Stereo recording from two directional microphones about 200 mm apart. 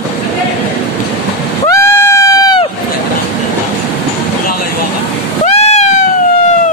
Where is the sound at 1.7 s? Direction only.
15° left (ahead or behind).